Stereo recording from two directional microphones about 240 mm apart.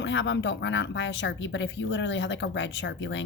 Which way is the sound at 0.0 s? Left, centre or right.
Left.